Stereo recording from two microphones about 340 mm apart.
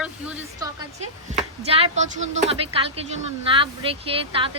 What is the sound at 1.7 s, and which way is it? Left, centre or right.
Speech, centre.